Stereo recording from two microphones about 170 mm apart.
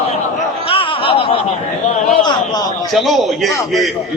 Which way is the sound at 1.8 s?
45° left (ahead or behind).